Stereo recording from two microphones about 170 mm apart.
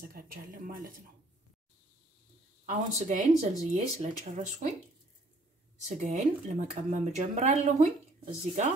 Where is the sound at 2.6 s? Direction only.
40° right (ahead or behind).